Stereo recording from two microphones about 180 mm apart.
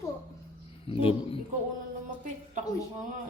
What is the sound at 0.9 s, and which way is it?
Speech, 30° left (ahead or behind).